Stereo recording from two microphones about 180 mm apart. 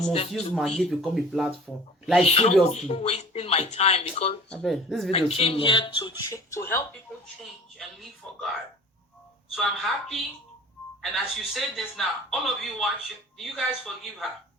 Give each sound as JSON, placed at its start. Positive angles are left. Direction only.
{"t": 0.5, "sound": "a man's voice", "side_deg": 0}
{"t": 2.2, "sound": "speech", "side_deg": 35}
{"t": 4.4, "sound": "a man's voice", "side_deg": 5}
{"t": 5.1, "sound": "speech", "side_deg": 35}
{"t": 6.2, "sound": "speech", "side_deg": 15}
{"t": 7.8, "sound": "a man's voice", "side_deg": 0}
{"t": 9.6, "sound": "a man's voice", "side_deg": 0}